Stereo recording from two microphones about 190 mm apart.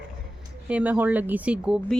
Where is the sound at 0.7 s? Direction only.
10° right (ahead or behind).